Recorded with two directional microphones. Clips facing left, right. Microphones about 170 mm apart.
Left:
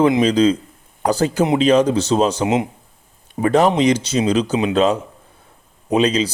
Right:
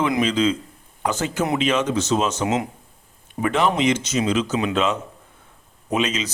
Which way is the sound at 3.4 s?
40° left (ahead or behind).